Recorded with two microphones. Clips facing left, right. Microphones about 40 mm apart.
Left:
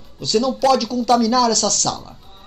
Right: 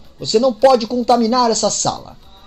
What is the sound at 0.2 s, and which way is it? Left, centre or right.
Speech, centre.